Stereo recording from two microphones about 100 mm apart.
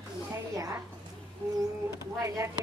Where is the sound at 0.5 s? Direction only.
35° right (ahead or behind).